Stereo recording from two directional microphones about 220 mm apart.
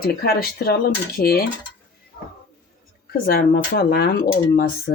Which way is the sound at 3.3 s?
45° left (ahead or behind).